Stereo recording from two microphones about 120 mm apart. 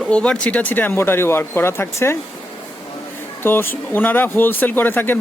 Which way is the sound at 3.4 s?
20° left (ahead or behind).